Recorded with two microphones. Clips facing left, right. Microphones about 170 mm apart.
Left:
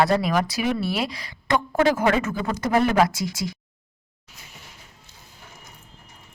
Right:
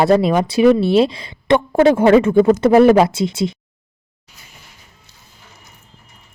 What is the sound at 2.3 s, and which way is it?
Speech, 50° right (ahead or behind).